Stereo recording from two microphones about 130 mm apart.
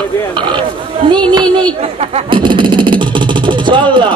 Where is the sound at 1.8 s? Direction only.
50° right (ahead or behind).